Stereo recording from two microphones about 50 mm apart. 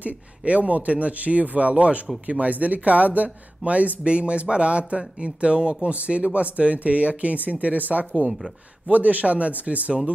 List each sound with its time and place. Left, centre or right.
0.0 s speech: right